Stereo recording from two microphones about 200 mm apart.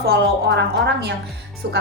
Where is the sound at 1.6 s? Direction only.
55° right (ahead or behind).